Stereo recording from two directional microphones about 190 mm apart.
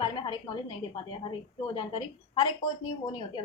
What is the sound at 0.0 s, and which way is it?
A woman's voice, 25° left (ahead or behind).